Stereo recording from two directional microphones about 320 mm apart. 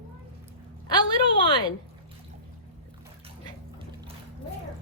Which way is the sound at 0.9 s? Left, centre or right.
Centre.